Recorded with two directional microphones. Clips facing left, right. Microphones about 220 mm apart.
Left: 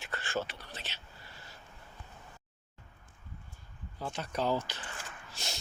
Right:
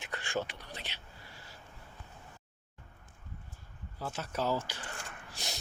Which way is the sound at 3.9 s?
5° right (ahead or behind).